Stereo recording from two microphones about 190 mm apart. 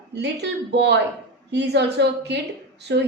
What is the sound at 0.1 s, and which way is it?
A woman's voice, 65° right (ahead or behind).